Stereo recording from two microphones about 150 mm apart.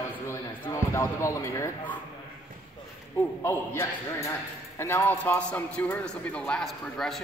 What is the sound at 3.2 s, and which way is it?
A man's voice, 15° left (ahead or behind).